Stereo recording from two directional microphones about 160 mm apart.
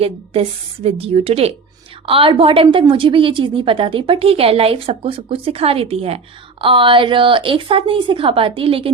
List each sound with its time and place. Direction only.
0.0 s a woman's voice: 40° right (ahead or behind)